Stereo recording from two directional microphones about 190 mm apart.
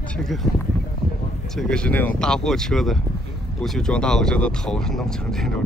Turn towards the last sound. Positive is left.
turn(degrees=0)  # may be behind; listen again after turning